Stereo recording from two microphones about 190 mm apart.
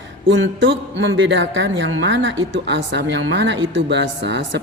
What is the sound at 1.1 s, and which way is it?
Speech, 75° right (ahead or behind).